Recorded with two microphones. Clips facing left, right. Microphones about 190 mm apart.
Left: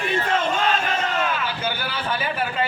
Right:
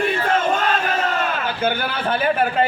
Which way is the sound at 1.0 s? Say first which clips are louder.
Right 2 dB; 50° right (ahead or behind).